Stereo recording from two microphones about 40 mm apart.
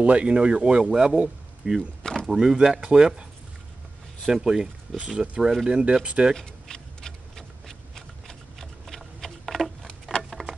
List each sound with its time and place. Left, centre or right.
0.0 s speech: right
2.0 s a sound: centre
2.3 s speech: centre
4.4 s speech: centre
5.4 s speech: centre
5.7 s speech: right
6.3 s shuffling cards: centre
10.1 s a sound: centre